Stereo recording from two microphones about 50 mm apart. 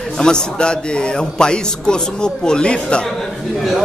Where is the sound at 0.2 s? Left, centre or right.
Centre.